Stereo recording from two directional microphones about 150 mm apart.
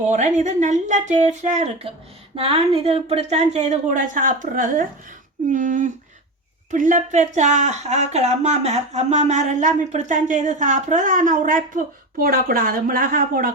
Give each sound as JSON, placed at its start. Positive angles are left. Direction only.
{"t": 0.1, "sound": "speech", "side_deg": -55}